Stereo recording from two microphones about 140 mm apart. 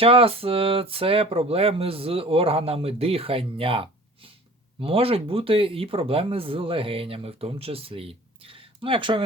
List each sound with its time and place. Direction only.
0.0 s speech: 45° right (ahead or behind)